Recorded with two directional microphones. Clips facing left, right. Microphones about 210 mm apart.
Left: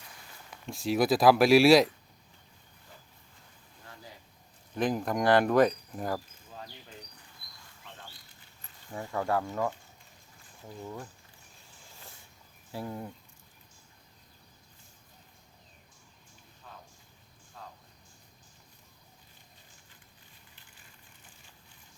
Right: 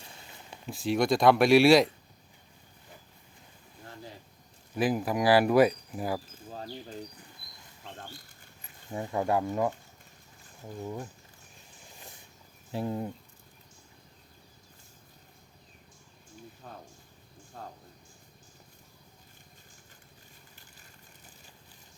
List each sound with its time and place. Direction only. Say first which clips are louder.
0.0 s a sound: right 2 dB; 25° right (ahead or behind)
0.7 s speech: even; centre (ahead or behind)
4.7 s speech: right 1 dB; 5° right (ahead or behind)
6.5 s a sound: right 7 dB; 35° right (ahead or behind)
8.9 s speech: right 2 dB; 20° right (ahead or behind)
10.8 s speech: right 4 dB; 15° right (ahead or behind)
11.9 s vehicle: right 2 dB; 15° right (ahead or behind)
12.7 s speech: right 5 dB; 25° right (ahead or behind)
16.6 s a sound: right 5 dB; 50° right (ahead or behind)